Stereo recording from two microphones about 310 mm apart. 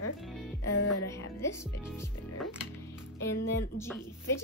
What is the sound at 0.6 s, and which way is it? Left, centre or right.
Music, left.